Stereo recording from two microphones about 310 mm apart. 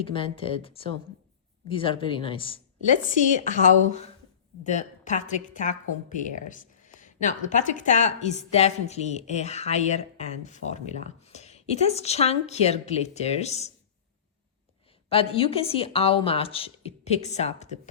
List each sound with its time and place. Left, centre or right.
0.0 s a woman's voice: centre
15.1 s a woman's voice: centre